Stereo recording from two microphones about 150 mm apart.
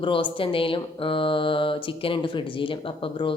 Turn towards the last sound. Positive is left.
turn(degrees=35)  # may be behind; listen again after turning